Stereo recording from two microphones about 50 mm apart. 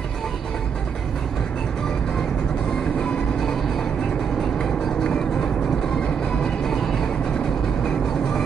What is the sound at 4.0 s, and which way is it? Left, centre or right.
Vehicle, centre.